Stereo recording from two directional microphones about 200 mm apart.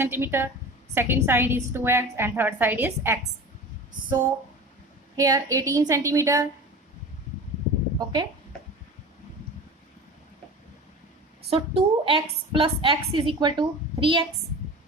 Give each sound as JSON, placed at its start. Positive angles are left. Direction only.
{"t": 0.0, "sound": "a woman's voice", "side_deg": -10}
{"t": 5.1, "sound": "a woman's voice", "side_deg": -15}
{"t": 7.9, "sound": "a woman's voice", "side_deg": -20}
{"t": 11.5, "sound": "a woman's voice", "side_deg": -25}